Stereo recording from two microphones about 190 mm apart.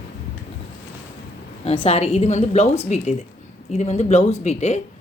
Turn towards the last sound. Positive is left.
turn(degrees=35)  # may be behind; listen again after turning